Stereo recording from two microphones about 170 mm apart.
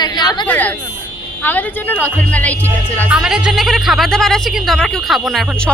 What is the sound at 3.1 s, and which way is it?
A woman's voice, 5° right (ahead or behind).